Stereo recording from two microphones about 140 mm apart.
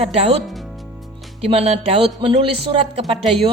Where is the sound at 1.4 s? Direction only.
45° right (ahead or behind).